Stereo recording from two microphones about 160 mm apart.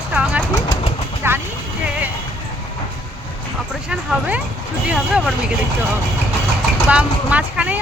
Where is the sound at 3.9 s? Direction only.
5° right (ahead or behind).